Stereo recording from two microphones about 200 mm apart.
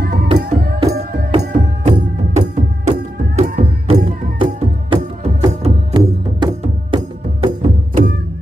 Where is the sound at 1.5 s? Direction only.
35° right (ahead or behind).